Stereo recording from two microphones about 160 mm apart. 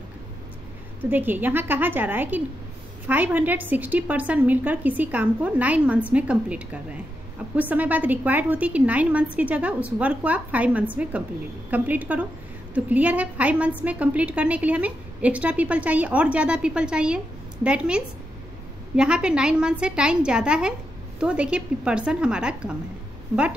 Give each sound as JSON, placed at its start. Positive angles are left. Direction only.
{"t": 1.1, "sound": "a woman's voice", "side_deg": -10}